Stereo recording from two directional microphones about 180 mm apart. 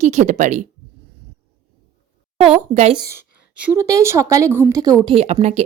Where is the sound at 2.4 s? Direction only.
35° right (ahead or behind).